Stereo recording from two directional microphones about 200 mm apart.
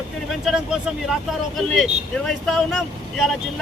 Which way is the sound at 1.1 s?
Centre (ahead or behind).